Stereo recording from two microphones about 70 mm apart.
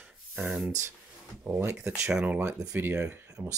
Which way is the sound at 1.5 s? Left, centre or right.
Right.